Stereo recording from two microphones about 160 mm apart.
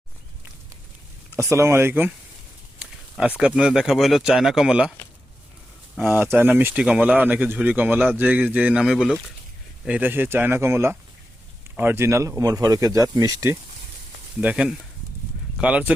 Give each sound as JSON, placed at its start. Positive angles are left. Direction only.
{"t": 1.4, "sound": "speech", "side_deg": -15}
{"t": 2.7, "sound": "a sound", "side_deg": -10}
{"t": 3.4, "sound": "speech", "side_deg": -5}
{"t": 6.0, "sound": "speech", "side_deg": -10}
{"t": 14.4, "sound": "speech", "side_deg": -5}